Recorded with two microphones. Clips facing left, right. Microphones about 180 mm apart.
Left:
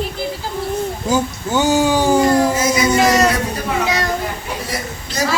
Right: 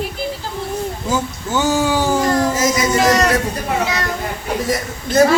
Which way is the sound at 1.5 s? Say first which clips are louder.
Left 2 dB; 15° left (ahead or behind).